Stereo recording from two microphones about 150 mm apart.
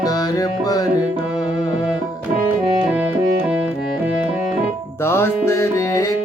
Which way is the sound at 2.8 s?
10° right (ahead or behind).